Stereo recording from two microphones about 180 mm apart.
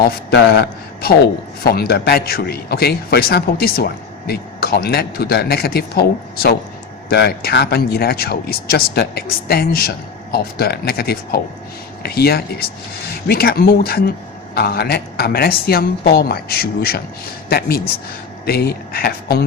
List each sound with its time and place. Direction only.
0.0 s a man's voice: 70° left (ahead or behind)